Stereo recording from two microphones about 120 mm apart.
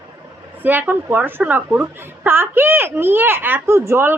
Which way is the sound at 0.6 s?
15° right (ahead or behind).